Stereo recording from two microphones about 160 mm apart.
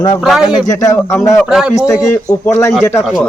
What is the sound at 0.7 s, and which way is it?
Speech, 20° left (ahead or behind).